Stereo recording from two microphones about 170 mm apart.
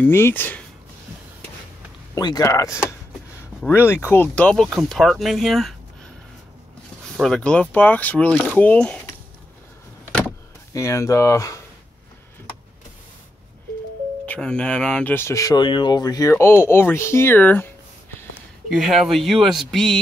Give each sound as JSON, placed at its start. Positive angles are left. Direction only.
{"t": 0.0, "sound": "speech", "side_deg": 10}
{"t": 2.1, "sound": "speech", "side_deg": 20}
{"t": 7.2, "sound": "speech", "side_deg": 0}
{"t": 10.7, "sound": "speech", "side_deg": 20}
{"t": 14.2, "sound": "speech", "side_deg": 5}
{"t": 18.7, "sound": "speech", "side_deg": 0}